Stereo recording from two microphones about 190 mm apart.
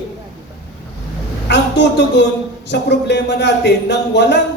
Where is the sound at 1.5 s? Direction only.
65° left (ahead or behind).